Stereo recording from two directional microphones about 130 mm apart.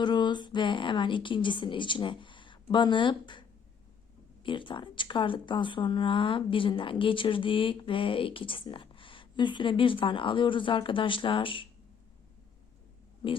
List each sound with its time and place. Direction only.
0.0 s speech: 35° left (ahead or behind)
4.4 s speech: 40° left (ahead or behind)